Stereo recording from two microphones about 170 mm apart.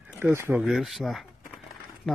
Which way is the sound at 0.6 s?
Centre (ahead or behind).